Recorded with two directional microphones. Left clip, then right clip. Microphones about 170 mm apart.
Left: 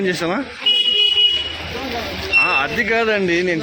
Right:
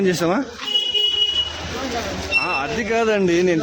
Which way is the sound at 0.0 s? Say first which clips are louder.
Right 1 dB; 30° right (ahead or behind).